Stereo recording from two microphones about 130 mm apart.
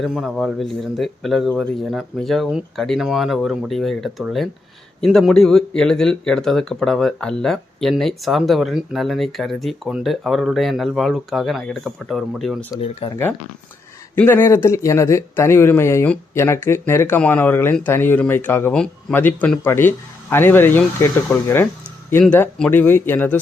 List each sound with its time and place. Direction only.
0.0 s speech: centre (ahead or behind)
13.0 s speech: 45° left (ahead or behind)
14.2 s speech: 15° left (ahead or behind)
22.2 s speech: 10° left (ahead or behind)